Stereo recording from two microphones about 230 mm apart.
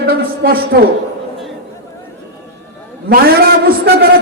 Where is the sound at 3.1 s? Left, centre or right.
Right.